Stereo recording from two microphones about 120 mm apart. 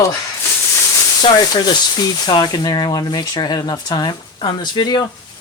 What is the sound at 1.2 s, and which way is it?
Speech, 35° left (ahead or behind).